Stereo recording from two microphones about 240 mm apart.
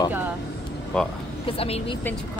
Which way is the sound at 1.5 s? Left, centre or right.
Left.